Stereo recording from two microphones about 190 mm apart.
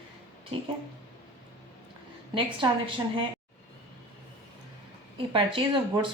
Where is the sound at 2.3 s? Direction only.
25° right (ahead or behind).